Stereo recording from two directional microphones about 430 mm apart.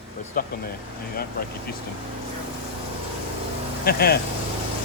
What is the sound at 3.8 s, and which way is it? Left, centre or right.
Speech, left.